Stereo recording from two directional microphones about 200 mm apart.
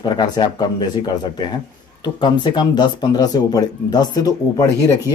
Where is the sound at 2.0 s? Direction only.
20° left (ahead or behind).